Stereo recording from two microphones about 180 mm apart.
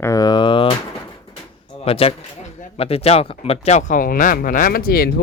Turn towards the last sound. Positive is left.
turn(degrees=55)  # may be behind; listen again after turning